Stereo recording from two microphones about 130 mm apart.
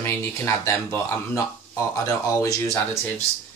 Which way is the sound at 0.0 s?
20° left (ahead or behind).